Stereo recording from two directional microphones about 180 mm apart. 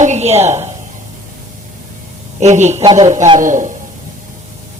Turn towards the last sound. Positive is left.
turn(degrees=-45)  # may be behind; listen again after turning